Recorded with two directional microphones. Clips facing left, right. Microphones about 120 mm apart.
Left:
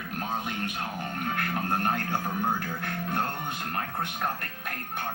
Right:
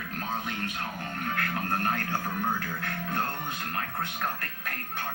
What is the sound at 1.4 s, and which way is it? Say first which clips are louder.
Speech: left 1 dB; 25° left (ahead or behind).